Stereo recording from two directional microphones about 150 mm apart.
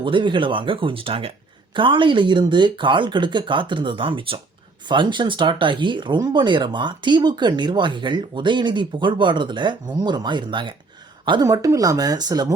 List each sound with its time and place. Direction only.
0.0 s speech: 35° right (ahead or behind)